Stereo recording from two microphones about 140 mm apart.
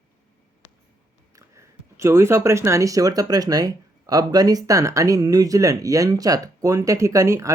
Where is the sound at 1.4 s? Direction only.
20° right (ahead or behind).